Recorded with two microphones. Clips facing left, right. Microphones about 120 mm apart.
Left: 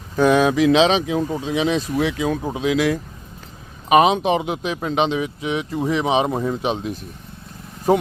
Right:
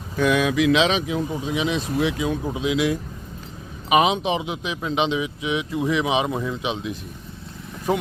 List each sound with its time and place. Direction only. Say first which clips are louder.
0.2 s a man's voice: left 4 dB; 35° left (ahead or behind)